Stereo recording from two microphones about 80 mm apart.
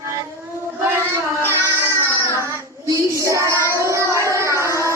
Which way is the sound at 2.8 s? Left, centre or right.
Right.